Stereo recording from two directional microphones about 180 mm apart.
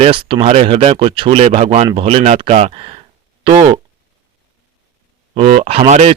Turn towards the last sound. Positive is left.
turn(degrees=-35)  # may be behind; listen again after turning